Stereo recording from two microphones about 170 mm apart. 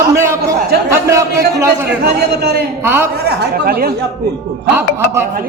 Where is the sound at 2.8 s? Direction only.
15° right (ahead or behind).